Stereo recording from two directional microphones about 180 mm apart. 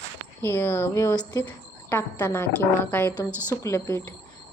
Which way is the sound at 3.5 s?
15° left (ahead or behind).